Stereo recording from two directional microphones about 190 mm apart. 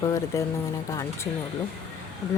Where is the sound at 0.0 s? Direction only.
15° left (ahead or behind).